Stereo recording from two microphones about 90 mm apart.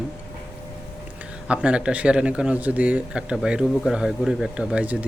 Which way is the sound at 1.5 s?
10° right (ahead or behind).